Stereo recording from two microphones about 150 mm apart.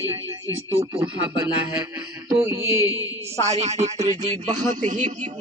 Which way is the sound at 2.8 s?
25° left (ahead or behind).